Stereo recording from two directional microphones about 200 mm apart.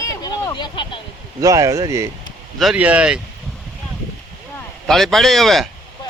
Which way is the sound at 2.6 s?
5° right (ahead or behind).